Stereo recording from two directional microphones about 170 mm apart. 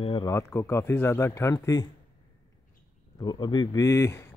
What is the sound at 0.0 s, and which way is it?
Speech, 25° left (ahead or behind).